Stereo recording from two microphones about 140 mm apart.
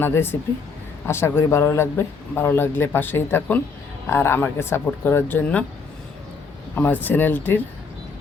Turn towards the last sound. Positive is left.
turn(degrees=15)  # may be behind; listen again after turning